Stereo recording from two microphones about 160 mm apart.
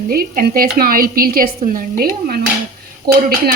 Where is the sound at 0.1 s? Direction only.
70° right (ahead or behind).